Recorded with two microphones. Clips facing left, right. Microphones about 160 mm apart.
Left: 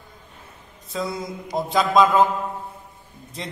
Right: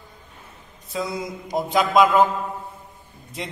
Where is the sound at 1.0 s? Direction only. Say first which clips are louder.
Even; centre (ahead or behind).